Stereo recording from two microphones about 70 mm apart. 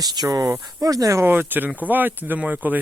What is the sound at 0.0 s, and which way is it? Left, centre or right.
Speech, right.